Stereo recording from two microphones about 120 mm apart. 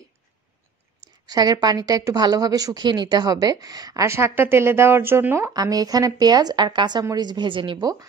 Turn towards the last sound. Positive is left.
turn(degrees=-45)  # may be behind; listen again after turning